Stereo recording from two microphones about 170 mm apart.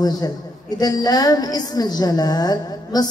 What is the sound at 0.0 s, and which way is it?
A woman's voice, 25° left (ahead or behind).